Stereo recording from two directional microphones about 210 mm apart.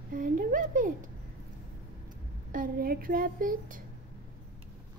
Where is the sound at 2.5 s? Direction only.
40° right (ahead or behind).